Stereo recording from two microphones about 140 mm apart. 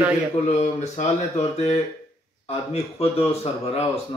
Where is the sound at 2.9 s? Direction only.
45° left (ahead or behind).